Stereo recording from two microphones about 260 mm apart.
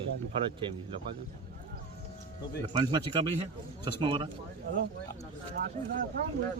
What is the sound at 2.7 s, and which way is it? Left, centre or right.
A man's voice, centre.